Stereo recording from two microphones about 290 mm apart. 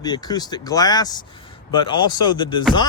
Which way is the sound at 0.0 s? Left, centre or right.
Centre.